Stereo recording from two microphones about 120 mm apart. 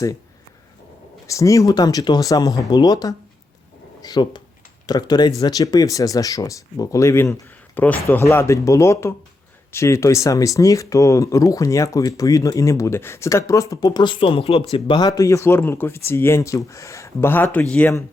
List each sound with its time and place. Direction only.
1.3 s speech: 25° left (ahead or behind); by 14.9 s 50° left (ahead or behind)
14.9 s speech: 35° left (ahead or behind); by 17.9 s 10° left (ahead or behind)